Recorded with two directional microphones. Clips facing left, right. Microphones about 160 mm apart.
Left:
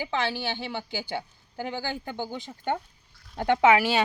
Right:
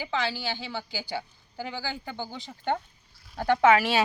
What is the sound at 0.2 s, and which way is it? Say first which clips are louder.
Speech: left 2 dB; 55° left (ahead or behind).